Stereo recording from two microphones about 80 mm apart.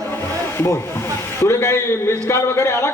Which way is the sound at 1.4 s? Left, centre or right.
Left.